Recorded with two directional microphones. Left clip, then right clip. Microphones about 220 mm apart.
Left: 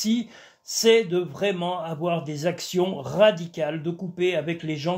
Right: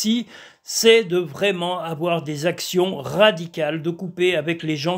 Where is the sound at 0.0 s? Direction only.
30° right (ahead or behind).